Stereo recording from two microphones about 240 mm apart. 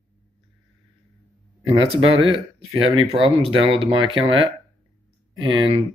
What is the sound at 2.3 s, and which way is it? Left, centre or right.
Speech, right.